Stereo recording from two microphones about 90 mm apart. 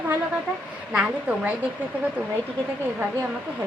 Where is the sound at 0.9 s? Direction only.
15° right (ahead or behind).